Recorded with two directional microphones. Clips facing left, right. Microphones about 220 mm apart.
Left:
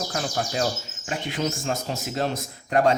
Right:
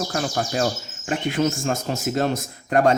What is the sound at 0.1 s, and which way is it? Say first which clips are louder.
Speech: right 3 dB; 50° right (ahead or behind).